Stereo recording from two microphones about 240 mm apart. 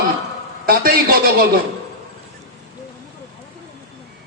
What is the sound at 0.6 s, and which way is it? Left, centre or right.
Speech, right.